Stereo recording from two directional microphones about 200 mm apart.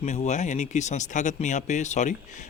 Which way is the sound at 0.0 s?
35° left (ahead or behind).